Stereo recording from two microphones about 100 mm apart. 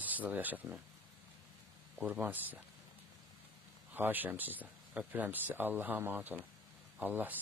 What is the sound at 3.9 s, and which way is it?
Speech, 20° right (ahead or behind).